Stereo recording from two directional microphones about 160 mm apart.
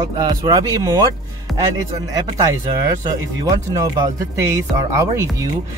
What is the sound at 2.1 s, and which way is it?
Speech, 25° right (ahead or behind).